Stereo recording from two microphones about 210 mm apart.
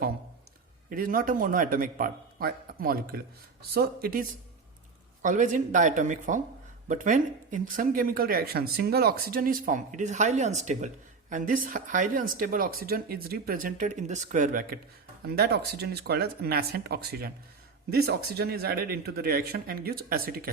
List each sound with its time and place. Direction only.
0.9 s speech: 40° right (ahead or behind)